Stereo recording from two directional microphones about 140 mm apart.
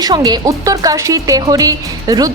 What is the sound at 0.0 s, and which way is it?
Speech, 30° right (ahead or behind).